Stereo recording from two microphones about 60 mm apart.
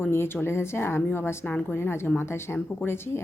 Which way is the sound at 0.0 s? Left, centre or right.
Left.